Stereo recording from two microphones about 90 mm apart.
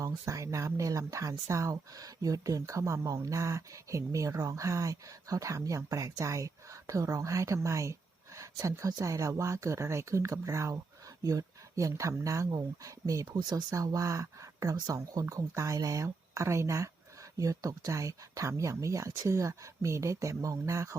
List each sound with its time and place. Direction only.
0.0 s speech: 35° right (ahead or behind)